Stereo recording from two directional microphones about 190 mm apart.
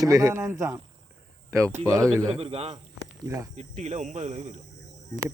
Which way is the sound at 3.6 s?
35° right (ahead or behind).